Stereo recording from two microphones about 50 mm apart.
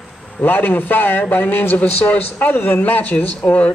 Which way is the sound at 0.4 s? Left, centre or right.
Left.